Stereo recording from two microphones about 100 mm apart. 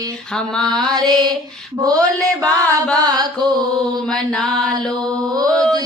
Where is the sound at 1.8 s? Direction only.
35° right (ahead or behind).